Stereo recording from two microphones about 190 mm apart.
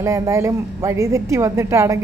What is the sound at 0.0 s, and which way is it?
Speech, 15° right (ahead or behind).